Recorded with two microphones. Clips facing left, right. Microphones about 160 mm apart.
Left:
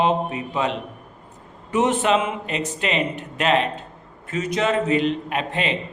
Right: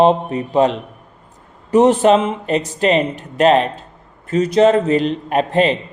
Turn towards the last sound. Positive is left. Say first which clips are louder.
# right 9 dB
turn(degrees=-40)  # may be behind; listen again after turning